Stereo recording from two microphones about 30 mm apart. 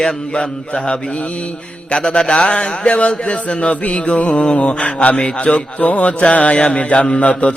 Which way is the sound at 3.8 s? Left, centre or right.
Left.